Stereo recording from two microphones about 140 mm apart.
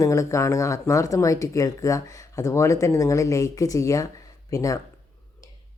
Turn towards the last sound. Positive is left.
turn(degrees=25)  # may be behind; listen again after turning